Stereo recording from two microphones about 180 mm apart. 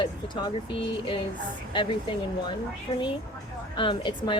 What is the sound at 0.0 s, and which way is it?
Speech, 25° left (ahead or behind).